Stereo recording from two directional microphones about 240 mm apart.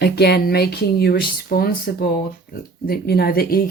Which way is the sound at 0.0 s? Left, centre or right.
Left.